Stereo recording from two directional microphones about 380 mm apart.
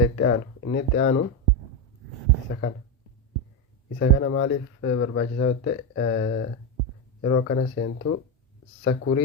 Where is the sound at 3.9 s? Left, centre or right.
Left.